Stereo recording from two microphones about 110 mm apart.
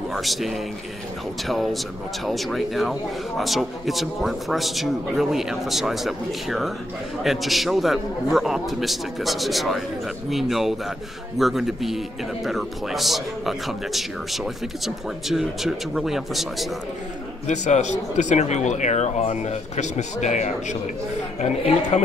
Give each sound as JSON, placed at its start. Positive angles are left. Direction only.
{"t": 0.1, "sound": "a man's voice", "side_deg": 0}
{"t": 17.5, "sound": "speech", "side_deg": 90}